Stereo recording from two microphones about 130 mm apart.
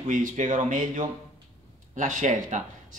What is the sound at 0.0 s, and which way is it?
Speech, 80° right.